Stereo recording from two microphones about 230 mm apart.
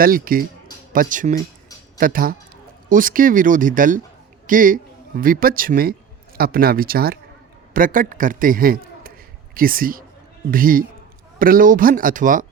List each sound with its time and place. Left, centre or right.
0.0 s a man's voice: right